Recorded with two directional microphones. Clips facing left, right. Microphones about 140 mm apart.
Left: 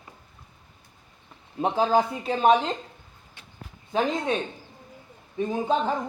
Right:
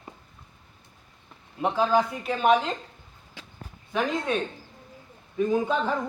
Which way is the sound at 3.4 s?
90° right.